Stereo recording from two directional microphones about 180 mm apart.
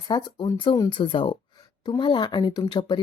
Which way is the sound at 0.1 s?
25° left (ahead or behind).